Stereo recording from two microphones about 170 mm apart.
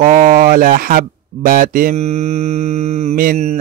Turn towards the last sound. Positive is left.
turn(degrees=-40)  # may be behind; listen again after turning